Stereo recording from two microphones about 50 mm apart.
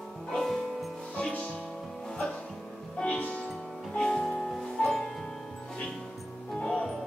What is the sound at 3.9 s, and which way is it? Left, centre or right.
Music, centre.